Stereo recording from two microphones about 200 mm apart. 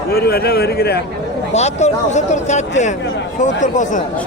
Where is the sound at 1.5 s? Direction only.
35° left (ahead or behind).